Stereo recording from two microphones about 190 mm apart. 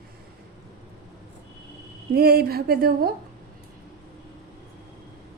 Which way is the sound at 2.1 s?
55° right (ahead or behind).